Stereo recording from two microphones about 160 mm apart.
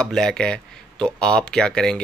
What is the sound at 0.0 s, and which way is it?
Speech, 5° left (ahead or behind).